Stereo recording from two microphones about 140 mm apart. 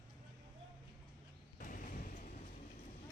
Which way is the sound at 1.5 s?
75° left (ahead or behind).